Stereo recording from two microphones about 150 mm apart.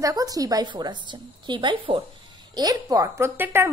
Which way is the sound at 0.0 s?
25° right (ahead or behind).